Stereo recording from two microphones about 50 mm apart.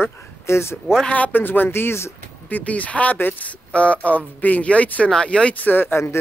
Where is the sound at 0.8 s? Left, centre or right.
Centre.